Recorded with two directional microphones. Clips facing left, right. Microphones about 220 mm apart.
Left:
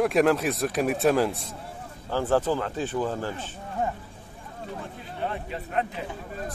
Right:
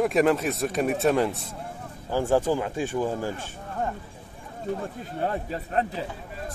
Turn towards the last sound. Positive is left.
turn(degrees=-35)  # may be behind; listen again after turning